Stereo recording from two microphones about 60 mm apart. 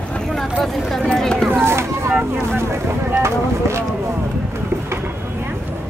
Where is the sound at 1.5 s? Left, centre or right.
Right.